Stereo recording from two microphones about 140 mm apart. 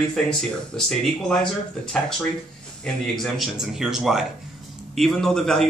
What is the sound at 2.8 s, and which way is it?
Speech, 5° left (ahead or behind).